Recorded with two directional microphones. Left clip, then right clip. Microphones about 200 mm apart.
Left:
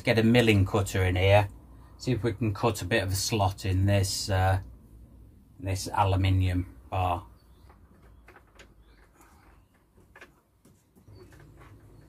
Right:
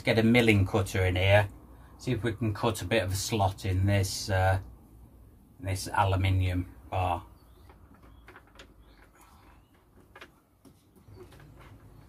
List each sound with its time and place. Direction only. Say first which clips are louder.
0.0 s speech: left 1 dB; 15° left (ahead or behind)
2.5 s speech: even; 10° left (ahead or behind)
5.6 s speech: left 1 dB; 10° left (ahead or behind)